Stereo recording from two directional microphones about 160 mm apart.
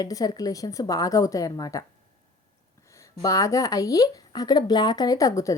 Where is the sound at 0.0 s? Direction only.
25° left (ahead or behind).